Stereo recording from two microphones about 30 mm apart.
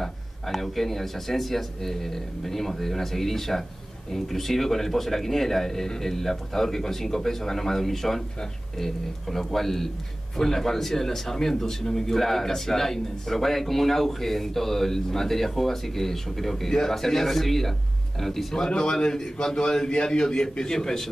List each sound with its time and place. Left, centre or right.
0.5 s speech: centre
18.7 s a man's voice: left